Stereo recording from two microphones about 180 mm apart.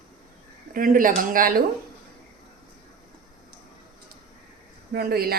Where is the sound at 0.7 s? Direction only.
50° right (ahead or behind).